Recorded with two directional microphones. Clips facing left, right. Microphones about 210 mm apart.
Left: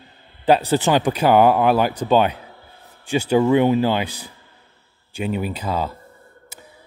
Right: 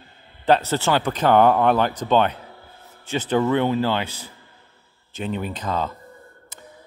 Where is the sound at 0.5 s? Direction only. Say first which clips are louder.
Left 3 dB; 15° left (ahead or behind).